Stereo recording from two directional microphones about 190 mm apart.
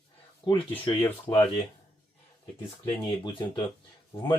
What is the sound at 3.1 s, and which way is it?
Speech, 25° left (ahead or behind).